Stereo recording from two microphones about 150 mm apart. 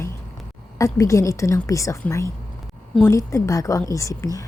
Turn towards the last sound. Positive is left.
turn(degrees=20)  # may be behind; listen again after turning